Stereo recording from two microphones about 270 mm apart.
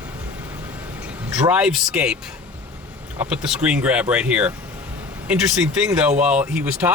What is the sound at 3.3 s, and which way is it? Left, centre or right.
Speech, centre.